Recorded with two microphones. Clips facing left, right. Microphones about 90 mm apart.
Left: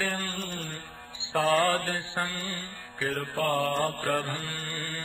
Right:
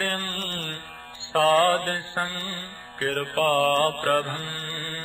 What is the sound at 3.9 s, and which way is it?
Mantra, 70° right (ahead or behind).